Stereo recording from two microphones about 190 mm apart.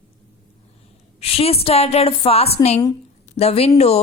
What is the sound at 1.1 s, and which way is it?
Speech, 30° left (ahead or behind).